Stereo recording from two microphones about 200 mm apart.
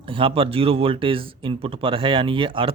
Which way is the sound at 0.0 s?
25° right (ahead or behind).